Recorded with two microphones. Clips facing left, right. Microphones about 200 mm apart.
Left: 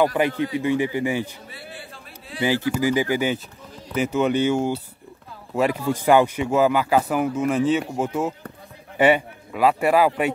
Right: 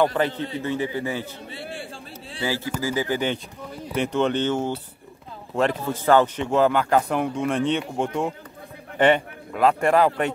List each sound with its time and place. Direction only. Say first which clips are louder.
0.0 s speech: left 1 dB; 5° left (ahead or behind)
0.3 s a man's voice: left 5 dB; 25° right (ahead or behind)
0.6 s speech: left 3 dB; 15° left (ahead or behind)
1.5 s speech: right 5 dB; 25° right (ahead or behind)
2.4 s a man's voice: left 5 dB; 15° left (ahead or behind)